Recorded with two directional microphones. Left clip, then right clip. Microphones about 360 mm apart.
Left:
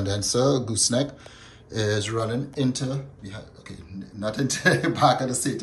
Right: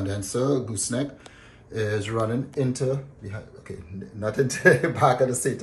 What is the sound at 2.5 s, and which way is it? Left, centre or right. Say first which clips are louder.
Speech: even; centre.